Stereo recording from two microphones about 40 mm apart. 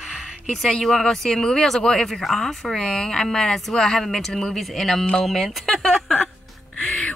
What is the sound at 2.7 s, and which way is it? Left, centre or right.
Speech, centre.